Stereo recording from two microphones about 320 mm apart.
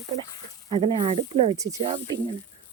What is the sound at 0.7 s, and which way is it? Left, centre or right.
Speech, centre.